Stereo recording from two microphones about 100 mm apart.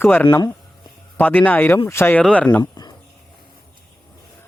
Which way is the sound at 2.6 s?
45° left (ahead or behind).